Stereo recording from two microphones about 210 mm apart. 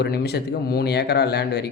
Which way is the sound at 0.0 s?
50° left (ahead or behind).